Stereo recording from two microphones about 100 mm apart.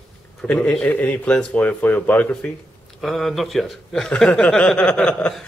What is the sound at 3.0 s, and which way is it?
Speech, centre (ahead or behind).